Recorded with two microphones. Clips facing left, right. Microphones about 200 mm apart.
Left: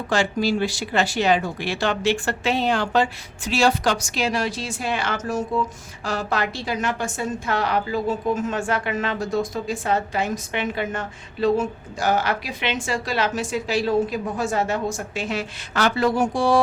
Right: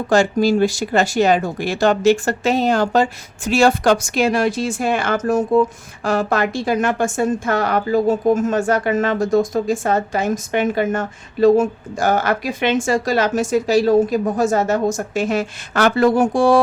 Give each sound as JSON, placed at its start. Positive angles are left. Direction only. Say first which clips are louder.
{"t": 0.1, "sound": "a woman's voice", "louder": "right 7 dB", "side_deg": -45}